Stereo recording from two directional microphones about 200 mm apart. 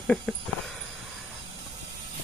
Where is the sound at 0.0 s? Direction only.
Centre (ahead or behind).